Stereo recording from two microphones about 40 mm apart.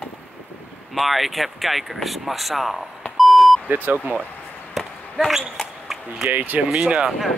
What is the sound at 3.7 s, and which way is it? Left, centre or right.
Speech, right.